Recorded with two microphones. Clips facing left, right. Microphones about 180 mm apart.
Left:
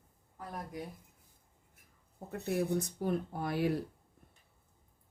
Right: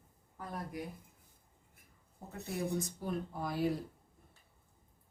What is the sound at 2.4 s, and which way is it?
Speech, 70° left (ahead or behind).